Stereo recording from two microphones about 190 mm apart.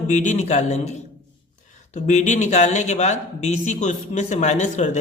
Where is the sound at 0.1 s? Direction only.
40° left (ahead or behind).